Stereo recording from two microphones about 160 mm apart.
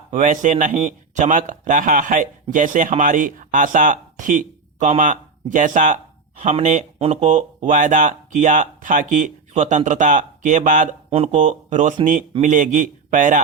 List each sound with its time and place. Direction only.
0.1 s speech: 50° right (ahead or behind)
11.1 s speech: 40° right (ahead or behind)